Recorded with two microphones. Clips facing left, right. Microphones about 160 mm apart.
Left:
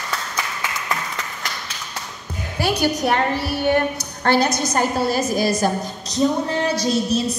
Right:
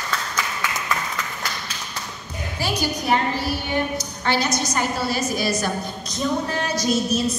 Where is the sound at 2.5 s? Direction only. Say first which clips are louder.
Left 5 dB; 60° left (ahead or behind); by 7.2 s 30° left (ahead or behind).